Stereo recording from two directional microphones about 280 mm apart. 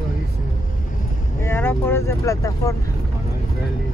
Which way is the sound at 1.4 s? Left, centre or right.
Centre.